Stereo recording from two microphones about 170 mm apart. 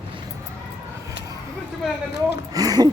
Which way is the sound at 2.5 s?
20° right (ahead or behind).